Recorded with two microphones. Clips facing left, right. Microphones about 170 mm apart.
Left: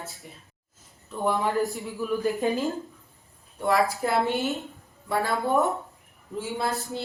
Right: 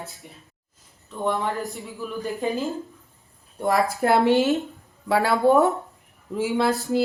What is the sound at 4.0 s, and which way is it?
Speech, 70° right (ahead or behind).